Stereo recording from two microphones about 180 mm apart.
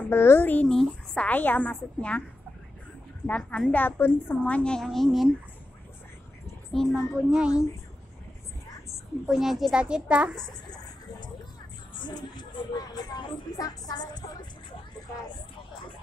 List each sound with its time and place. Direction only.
0.1 s a woman's voice: 15° left (ahead or behind)
3.3 s a woman's voice: 5° left (ahead or behind)
6.7 s a child's voice: centre (ahead or behind)
9.2 s a child's voice: centre (ahead or behind)
12.0 s a sound: 25° left (ahead or behind)